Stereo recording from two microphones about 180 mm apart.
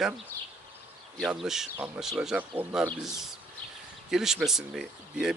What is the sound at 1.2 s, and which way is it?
Speech, centre (ahead or behind).